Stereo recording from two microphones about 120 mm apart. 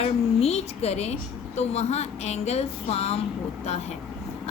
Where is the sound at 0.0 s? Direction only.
60° left (ahead or behind).